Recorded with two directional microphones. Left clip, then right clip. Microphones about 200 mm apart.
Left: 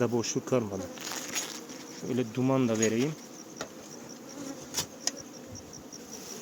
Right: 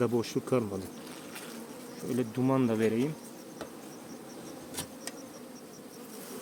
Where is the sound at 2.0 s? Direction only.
15° left (ahead or behind).